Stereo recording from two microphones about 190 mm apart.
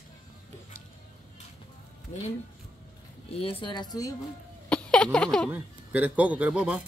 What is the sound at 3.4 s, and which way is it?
Speech, 30° left (ahead or behind).